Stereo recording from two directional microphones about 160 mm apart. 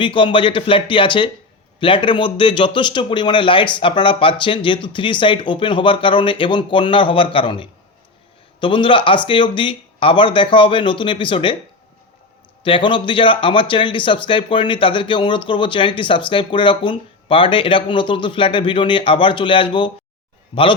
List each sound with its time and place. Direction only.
0.0 s speech: 30° left (ahead or behind)
12.6 s speech: 30° left (ahead or behind)